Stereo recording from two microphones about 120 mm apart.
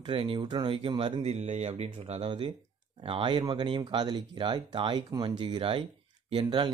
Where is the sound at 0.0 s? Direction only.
45° right (ahead or behind).